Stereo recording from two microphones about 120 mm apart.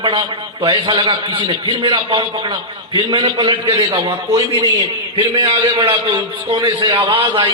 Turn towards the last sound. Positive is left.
turn(degrees=-40)  # may be behind; listen again after turning